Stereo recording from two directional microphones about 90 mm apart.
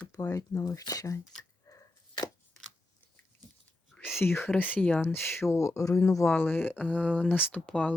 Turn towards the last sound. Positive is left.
turn(degrees=15)  # may be behind; listen again after turning